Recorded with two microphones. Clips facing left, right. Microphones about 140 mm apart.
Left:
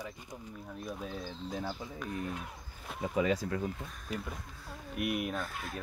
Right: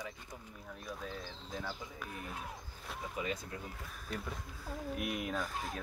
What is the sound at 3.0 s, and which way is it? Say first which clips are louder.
Speech: left 9 dB; 85° left.